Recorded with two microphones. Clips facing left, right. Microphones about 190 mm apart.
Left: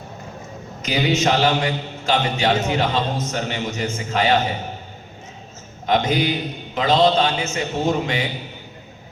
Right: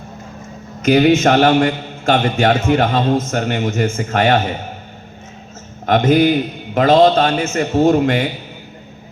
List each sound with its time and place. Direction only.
0.8 s a man's voice: 50° right (ahead or behind)
5.8 s a man's voice: 55° right (ahead or behind)